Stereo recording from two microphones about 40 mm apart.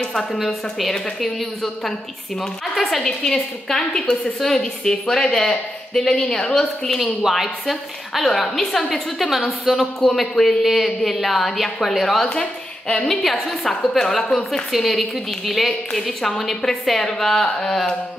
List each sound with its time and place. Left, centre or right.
0.0 s a sound: centre
0.5 s a woman's voice: centre
3.0 s a woman's voice: centre
7.2 s a woman's voice: centre
9.7 s speech: centre
10.6 s a woman's voice: centre
12.3 s a woman's voice: left
13.2 s a woman's voice: centre